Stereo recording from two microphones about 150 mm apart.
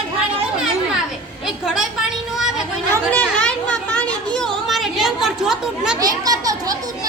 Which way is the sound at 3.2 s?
10° left (ahead or behind).